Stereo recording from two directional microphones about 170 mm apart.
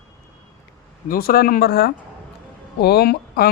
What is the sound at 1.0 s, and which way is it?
Speech, 60° left (ahead or behind).